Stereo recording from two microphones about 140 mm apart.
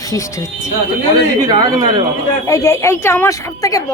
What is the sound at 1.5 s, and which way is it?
Speech, 30° right (ahead or behind).